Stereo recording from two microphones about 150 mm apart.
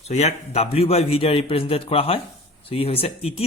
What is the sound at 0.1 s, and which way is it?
A man's voice, 45° left (ahead or behind).